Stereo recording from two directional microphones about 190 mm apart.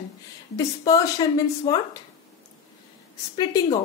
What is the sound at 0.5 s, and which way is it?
Speech, 20° left (ahead or behind).